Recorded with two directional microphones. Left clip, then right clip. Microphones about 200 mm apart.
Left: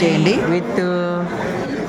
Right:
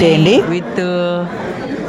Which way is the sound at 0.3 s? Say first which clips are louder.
Right 5 dB; 20° right (ahead or behind).